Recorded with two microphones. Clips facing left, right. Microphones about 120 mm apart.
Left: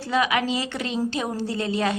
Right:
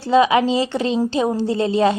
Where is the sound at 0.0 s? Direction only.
30° right (ahead or behind).